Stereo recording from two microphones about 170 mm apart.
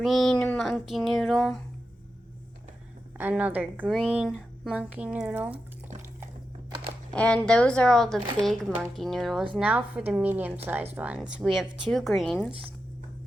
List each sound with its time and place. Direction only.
0.0 s speech: centre (ahead or behind)
3.2 s a woman's voice: 10° right (ahead or behind)
7.1 s a woman's voice: 5° left (ahead or behind)